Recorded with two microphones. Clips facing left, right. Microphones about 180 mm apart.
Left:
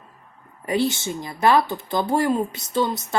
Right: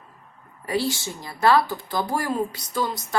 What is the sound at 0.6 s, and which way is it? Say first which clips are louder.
Speech: left 3 dB; 20° left (ahead or behind).